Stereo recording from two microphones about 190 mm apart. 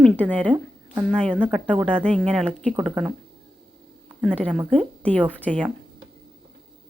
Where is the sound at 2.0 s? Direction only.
Centre (ahead or behind).